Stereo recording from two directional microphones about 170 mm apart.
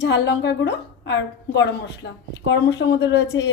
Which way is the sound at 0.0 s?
90° left.